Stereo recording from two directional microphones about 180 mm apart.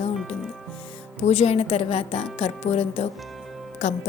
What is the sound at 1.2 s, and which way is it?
Speech, 35° left (ahead or behind).